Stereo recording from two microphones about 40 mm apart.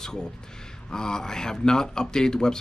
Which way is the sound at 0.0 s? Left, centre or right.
Centre.